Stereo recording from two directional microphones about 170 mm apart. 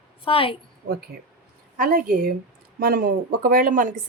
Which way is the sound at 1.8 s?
55° right (ahead or behind).